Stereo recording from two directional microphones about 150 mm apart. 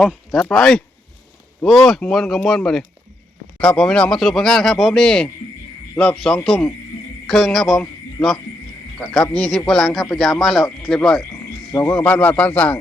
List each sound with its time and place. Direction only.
0.5 s speech: 5° left (ahead or behind)
9.0 s speech: 5° left (ahead or behind)